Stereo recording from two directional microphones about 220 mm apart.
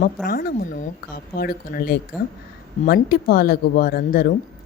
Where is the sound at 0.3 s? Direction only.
40° left (ahead or behind).